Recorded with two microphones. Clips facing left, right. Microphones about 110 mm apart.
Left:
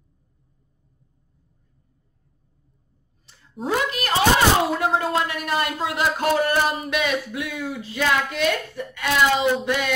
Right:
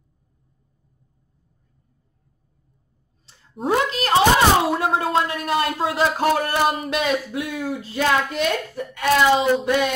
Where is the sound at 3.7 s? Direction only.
25° right (ahead or behind).